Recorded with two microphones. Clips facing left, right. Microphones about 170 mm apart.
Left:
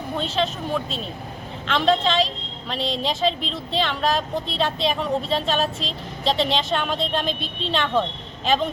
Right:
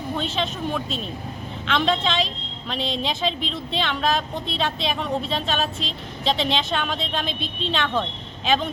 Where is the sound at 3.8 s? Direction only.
5° left (ahead or behind).